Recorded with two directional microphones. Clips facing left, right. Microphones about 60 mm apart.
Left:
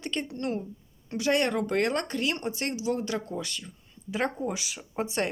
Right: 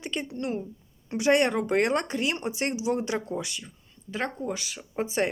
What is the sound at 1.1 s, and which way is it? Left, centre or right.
Speech, right.